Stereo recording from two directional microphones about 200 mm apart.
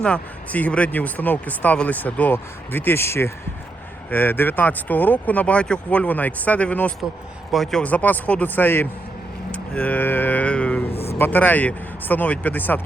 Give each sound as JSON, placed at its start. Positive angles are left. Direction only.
{"t": 0.0, "sound": "speech", "side_deg": 5}
{"t": 10.9, "sound": "a sound", "side_deg": 30}
{"t": 11.2, "sound": "speech", "side_deg": 10}